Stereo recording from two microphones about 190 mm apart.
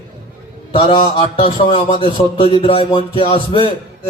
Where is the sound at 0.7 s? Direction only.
30° left (ahead or behind).